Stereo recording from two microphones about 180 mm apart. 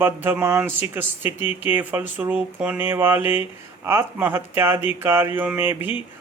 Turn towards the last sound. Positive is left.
turn(degrees=-10)  # may be behind; listen again after turning